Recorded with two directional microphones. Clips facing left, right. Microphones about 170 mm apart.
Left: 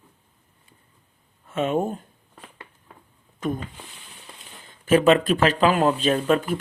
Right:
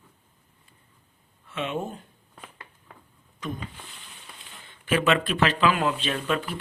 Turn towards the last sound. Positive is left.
turn(degrees=45)  # may be behind; listen again after turning